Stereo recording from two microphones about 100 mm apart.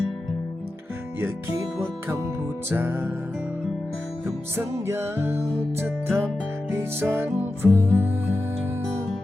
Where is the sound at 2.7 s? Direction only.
20° right (ahead or behind).